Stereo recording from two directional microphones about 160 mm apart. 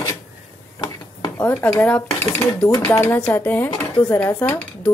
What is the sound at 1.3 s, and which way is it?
Speech, 10° left (ahead or behind).